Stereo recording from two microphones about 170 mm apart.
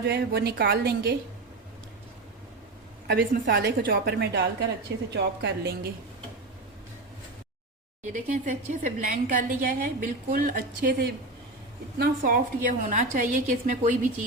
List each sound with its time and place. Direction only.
0.0 s a woman's voice: 70° right (ahead or behind)
3.1 s a woman's voice: 65° right (ahead or behind)
5.1 s a woman's voice: 80° right
8.1 s a woman's voice: 45° right (ahead or behind)